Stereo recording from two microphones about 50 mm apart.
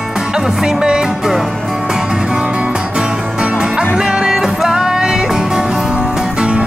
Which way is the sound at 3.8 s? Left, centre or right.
Centre.